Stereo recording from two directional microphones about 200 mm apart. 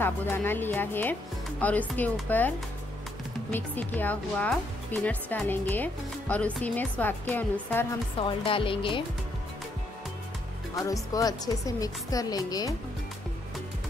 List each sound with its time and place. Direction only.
0.0 s speech: 10° left (ahead or behind)
8.2 s speech: 25° left (ahead or behind)
10.8 s speech: 15° left (ahead or behind)